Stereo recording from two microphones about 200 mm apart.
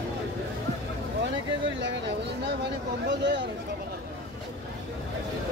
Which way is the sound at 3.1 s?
60° right (ahead or behind).